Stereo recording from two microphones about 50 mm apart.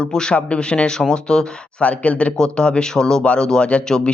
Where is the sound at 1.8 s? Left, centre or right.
Left.